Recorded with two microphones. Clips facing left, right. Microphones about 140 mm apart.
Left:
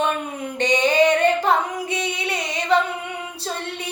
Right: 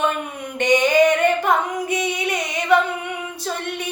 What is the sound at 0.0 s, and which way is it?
Singing, 30° left (ahead or behind).